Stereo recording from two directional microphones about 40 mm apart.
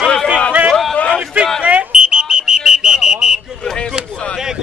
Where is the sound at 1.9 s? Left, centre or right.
Right.